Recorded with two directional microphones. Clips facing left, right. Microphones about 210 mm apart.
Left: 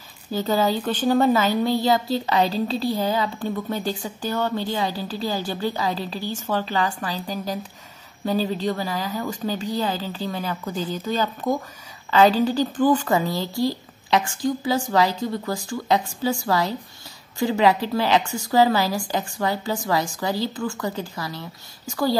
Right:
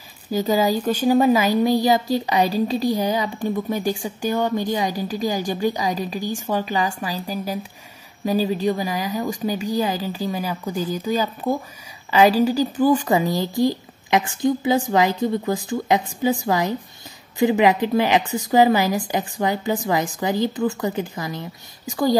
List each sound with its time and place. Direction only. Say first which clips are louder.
0.3 s a woman's voice: right 2 dB; 10° right (ahead or behind)